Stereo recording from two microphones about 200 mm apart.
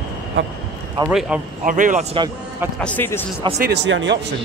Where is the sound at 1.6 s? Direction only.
40° right (ahead or behind).